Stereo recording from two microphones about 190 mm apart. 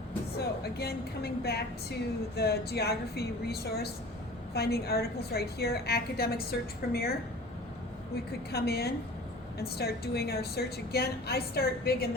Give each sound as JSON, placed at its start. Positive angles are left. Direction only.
{"t": 0.3, "sound": "a woman's voice", "side_deg": 55}